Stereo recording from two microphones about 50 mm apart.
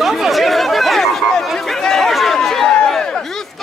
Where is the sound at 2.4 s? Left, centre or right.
Centre.